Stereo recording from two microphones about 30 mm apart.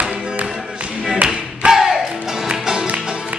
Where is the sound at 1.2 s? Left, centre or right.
Right.